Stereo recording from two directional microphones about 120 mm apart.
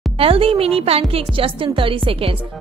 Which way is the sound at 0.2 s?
50° right (ahead or behind).